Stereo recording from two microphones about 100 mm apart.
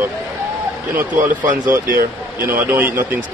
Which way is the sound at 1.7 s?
20° right (ahead or behind).